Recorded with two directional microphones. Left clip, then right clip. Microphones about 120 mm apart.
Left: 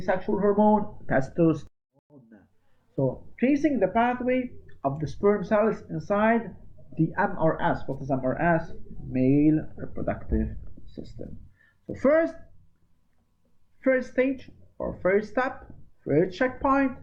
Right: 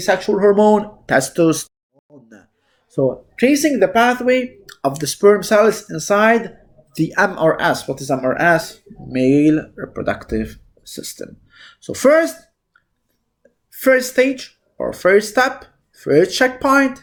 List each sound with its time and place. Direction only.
0.0 s speech: 35° right (ahead or behind)
2.9 s speech: 35° right (ahead or behind)
13.8 s speech: 35° right (ahead or behind)